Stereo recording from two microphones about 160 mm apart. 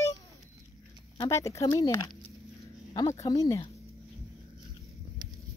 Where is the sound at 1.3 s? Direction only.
20° left (ahead or behind).